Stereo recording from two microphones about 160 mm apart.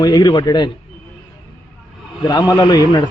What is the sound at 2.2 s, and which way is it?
Speech, 25° left (ahead or behind).